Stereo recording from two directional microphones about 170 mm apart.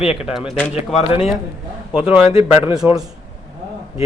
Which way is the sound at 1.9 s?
5° right (ahead or behind).